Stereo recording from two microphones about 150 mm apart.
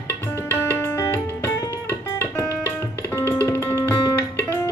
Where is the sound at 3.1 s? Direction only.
15° left (ahead or behind).